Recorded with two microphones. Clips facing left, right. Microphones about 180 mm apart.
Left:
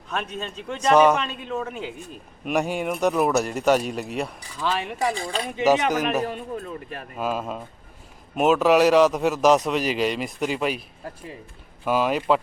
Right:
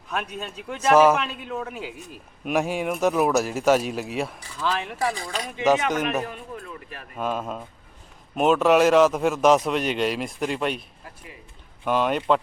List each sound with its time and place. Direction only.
0.1 s a man's voice: 5° right (ahead or behind)
4.9 s speech: 20° left (ahead or behind)
5.9 s a man's voice: centre (ahead or behind)
6.2 s speech: 30° left (ahead or behind)
7.2 s a man's voice: 5° left (ahead or behind)
11.9 s a man's voice: 5° left (ahead or behind)